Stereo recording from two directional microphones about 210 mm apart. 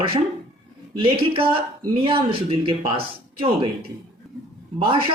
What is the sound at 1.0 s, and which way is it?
Speech, 25° right (ahead or behind).